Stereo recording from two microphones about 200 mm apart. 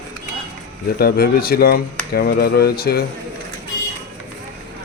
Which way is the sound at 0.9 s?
50° left (ahead or behind).